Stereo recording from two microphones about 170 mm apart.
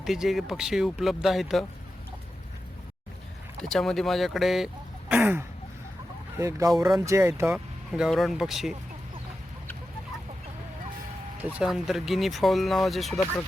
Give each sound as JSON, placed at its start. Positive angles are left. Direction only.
{"t": 0.0, "sound": "speech", "side_deg": 0}
{"t": 3.6, "sound": "speech", "side_deg": 0}
{"t": 7.5, "sound": "speech", "side_deg": 0}
{"t": 11.4, "sound": "speech", "side_deg": -5}